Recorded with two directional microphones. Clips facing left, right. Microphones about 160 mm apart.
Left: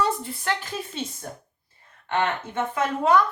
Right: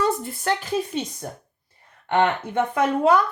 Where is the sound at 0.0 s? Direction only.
45° right (ahead or behind).